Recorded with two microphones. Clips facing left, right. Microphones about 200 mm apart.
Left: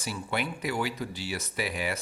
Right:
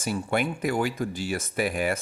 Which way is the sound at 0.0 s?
50° right (ahead or behind).